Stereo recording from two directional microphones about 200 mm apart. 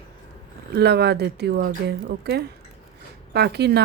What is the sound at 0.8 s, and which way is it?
Speech, 55° right (ahead or behind).